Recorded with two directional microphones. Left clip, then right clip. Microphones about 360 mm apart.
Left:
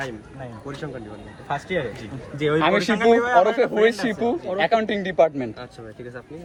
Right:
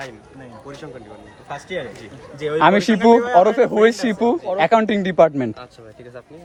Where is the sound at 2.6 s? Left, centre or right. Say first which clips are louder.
Right 6 dB; right.